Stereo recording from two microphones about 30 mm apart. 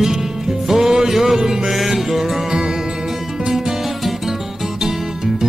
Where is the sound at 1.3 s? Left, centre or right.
Right.